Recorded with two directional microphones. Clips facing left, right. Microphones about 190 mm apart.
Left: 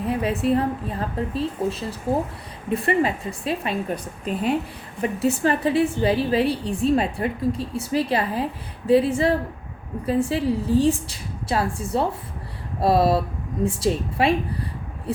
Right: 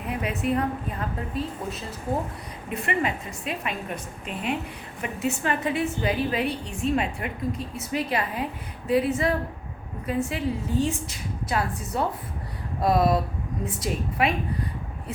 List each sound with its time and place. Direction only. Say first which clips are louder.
0.1 s a woman's voice: left 4 dB; 30° left (ahead or behind)